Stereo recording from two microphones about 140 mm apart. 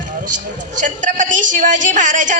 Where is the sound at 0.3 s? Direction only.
65° right (ahead or behind).